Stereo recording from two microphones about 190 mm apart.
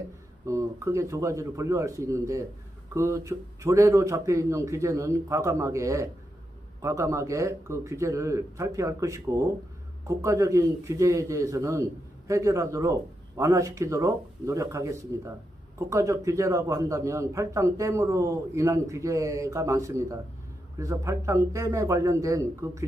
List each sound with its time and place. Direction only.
0.5 s a man's voice: 15° right (ahead or behind)